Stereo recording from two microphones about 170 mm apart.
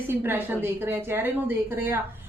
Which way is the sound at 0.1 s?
10° right (ahead or behind).